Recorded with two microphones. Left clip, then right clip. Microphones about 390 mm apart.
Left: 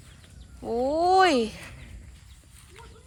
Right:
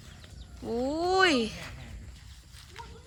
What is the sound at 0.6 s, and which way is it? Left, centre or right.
Speech, centre.